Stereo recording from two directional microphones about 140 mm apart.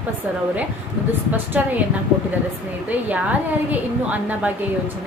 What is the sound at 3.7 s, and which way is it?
Speech, 10° right (ahead or behind).